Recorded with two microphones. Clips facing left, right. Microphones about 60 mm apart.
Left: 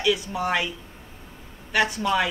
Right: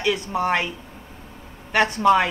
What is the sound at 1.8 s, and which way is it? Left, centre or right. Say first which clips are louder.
Speech: right 9 dB; right.